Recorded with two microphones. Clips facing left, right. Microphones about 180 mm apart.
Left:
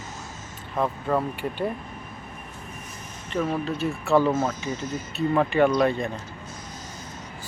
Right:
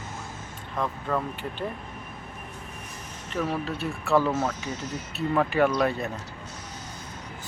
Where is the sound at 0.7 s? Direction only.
25° left (ahead or behind).